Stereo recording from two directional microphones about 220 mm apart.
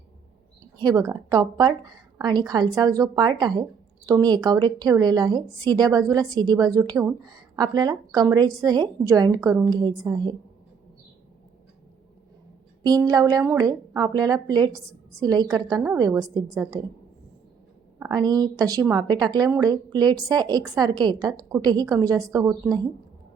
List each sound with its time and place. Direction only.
0.8 s a woman's voice: 15° right (ahead or behind)
12.8 s a woman's voice: 15° right (ahead or behind)
18.0 s a woman's voice: 20° right (ahead or behind)